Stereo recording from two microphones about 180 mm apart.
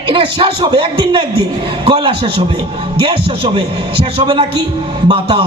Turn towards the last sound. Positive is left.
turn(degrees=-30)  # may be behind; listen again after turning